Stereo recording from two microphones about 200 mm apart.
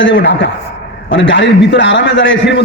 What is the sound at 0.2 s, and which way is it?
A man's voice, 60° left (ahead or behind).